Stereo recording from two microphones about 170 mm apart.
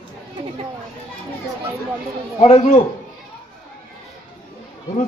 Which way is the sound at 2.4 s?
40° left (ahead or behind).